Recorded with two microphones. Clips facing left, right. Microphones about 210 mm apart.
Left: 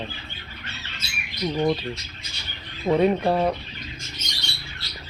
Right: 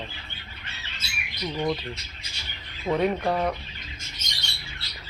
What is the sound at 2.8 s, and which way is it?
Speech, 20° left (ahead or behind).